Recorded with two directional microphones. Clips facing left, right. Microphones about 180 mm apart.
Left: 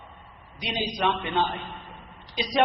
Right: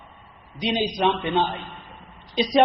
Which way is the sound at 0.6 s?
20° right (ahead or behind).